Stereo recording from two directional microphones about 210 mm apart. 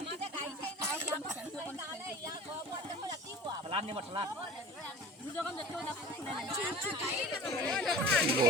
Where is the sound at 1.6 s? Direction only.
15° right (ahead or behind).